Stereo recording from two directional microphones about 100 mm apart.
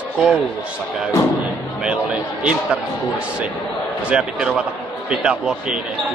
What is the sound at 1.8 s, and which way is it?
Speech, 10° right (ahead or behind).